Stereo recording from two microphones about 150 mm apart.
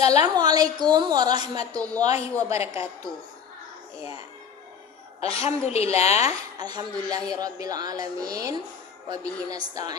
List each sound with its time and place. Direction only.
0.0 s a woman's voice: 45° left (ahead or behind)
0.3 s speech: 25° right (ahead or behind)
5.2 s a woman's voice: 40° left (ahead or behind)
6.6 s speech: 25° right (ahead or behind)